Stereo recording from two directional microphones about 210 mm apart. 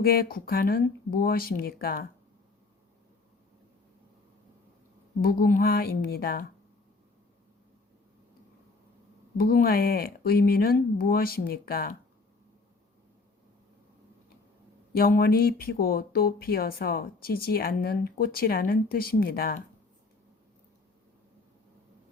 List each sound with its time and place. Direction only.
0.0 s speech: 45° left (ahead or behind)
5.2 s speech: 45° left (ahead or behind)
9.4 s speech: 45° left (ahead or behind)
14.9 s speech: 45° left (ahead or behind)